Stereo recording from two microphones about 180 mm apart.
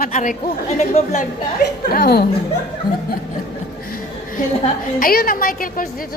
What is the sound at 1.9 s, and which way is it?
Speech, 55° left (ahead or behind).